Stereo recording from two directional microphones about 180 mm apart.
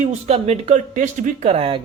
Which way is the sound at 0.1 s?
35° right (ahead or behind).